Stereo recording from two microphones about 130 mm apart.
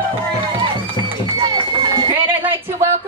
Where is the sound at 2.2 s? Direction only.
15° right (ahead or behind).